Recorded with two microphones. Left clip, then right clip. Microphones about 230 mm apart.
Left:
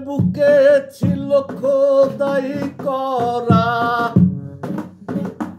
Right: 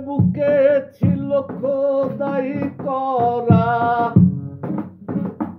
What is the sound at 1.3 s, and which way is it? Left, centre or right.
Music, left.